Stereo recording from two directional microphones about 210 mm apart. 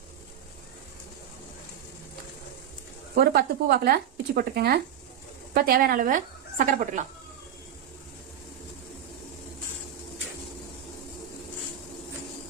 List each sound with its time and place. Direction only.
3.2 s a woman's voice: 50° right (ahead or behind)